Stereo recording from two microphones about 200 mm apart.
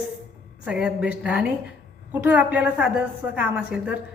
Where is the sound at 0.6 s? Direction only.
5° right (ahead or behind).